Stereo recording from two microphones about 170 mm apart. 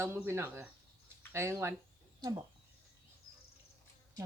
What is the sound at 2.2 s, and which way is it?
Speech, 25° right (ahead or behind).